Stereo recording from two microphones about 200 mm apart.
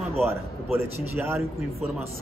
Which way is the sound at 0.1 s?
10° right (ahead or behind).